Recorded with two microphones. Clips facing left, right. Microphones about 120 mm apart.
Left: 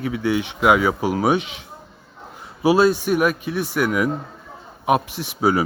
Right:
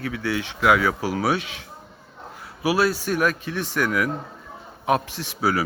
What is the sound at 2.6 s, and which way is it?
Speech, 25° left (ahead or behind).